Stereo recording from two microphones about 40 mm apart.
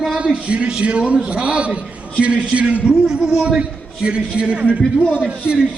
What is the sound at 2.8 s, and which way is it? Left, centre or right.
Speech, centre.